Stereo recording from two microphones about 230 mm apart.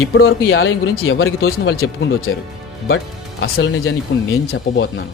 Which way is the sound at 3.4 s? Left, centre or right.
Left.